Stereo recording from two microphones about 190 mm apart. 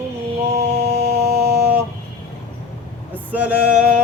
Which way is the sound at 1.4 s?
55° right (ahead or behind).